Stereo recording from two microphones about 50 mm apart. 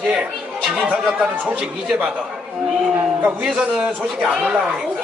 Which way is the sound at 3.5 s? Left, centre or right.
Centre.